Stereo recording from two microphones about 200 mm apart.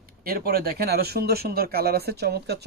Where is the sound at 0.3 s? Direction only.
50° right (ahead or behind).